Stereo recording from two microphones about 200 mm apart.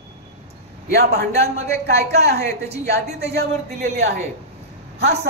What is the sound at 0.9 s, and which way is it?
Speech, 55° right (ahead or behind).